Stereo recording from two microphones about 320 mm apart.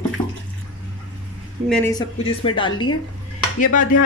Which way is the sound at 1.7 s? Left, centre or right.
Centre.